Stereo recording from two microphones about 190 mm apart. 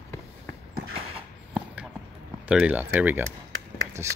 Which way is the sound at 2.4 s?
5° right (ahead or behind).